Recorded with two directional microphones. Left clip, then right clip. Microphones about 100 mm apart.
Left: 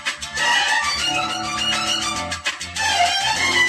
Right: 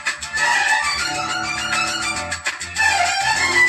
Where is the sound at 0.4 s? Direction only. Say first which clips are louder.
Right 1 dB; 35° left (ahead or behind).